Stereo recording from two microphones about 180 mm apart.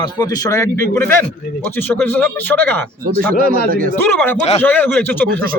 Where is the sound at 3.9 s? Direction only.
10° left (ahead or behind).